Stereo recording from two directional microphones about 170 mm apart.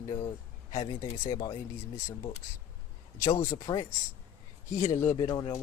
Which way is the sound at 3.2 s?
20° left (ahead or behind).